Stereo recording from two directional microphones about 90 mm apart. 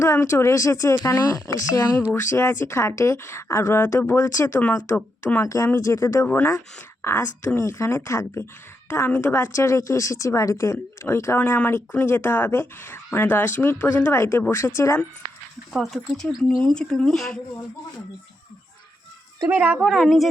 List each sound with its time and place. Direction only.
0.0 s a woman's voice: 35° left (ahead or behind)
2.3 s a woman's voice: 25° left (ahead or behind)
6.2 s a woman's voice: 25° left (ahead or behind)
8.9 s a woman's voice: 20° left (ahead or behind)
15.7 s speech: centre (ahead or behind)
19.5 s speech: 15° right (ahead or behind)
19.8 s speech: centre (ahead or behind)